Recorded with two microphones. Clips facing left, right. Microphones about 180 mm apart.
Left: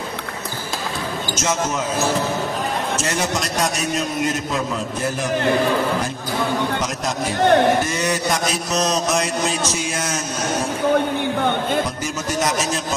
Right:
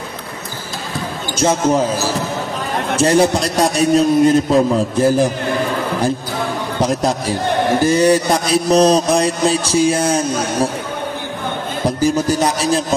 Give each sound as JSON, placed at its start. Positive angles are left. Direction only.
{"t": 1.3, "sound": "a man's voice", "side_deg": -30}
{"t": 6.8, "sound": "a man's voice", "side_deg": -35}
{"t": 12.0, "sound": "a man's voice", "side_deg": -30}